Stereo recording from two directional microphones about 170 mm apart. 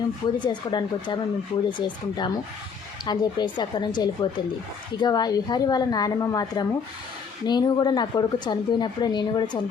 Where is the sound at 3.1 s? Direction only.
25° left (ahead or behind).